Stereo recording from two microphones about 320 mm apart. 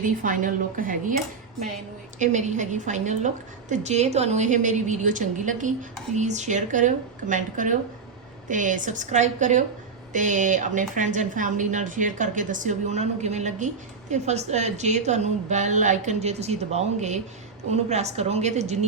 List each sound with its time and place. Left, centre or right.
0.0 s a woman's voice: right
2.1 s a woman's voice: right